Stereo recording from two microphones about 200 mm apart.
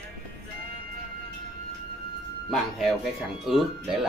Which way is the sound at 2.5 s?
Centre (ahead or behind).